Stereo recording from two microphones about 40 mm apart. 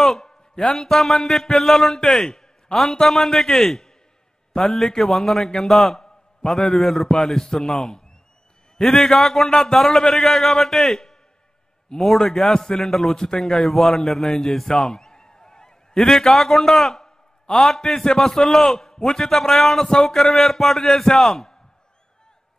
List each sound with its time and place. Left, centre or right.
0.0 s a man's voice: centre
14.7 s a sound: centre
16.1 s a man's voice: centre
19.8 s a man's voice: centre